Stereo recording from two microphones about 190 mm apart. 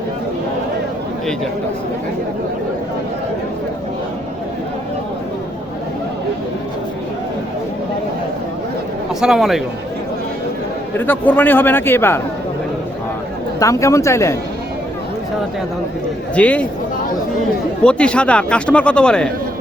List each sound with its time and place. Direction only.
9.2 s a man's voice: centre (ahead or behind)
10.9 s a man's voice: 10° left (ahead or behind)
13.6 s a man's voice: 15° left (ahead or behind)
16.3 s a man's voice: 5° left (ahead or behind)
17.8 s a man's voice: 5° left (ahead or behind)